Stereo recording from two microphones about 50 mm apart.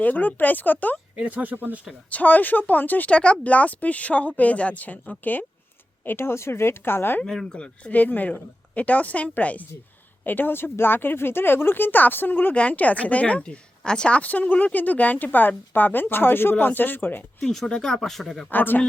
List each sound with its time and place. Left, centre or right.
0.0 s speech: left
1.2 s speech: right
2.0 s speech: left
3.1 s speech: left
6.1 s speech: left
7.3 s speech: centre
7.9 s speech: left
10.2 s speech: left
12.5 s speech: left
14.2 s speech: left
17.4 s speech: centre
17.9 s speech: centre
18.5 s speech: left